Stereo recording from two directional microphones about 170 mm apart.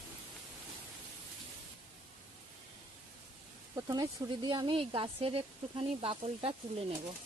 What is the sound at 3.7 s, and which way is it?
Speech, 20° right (ahead or behind).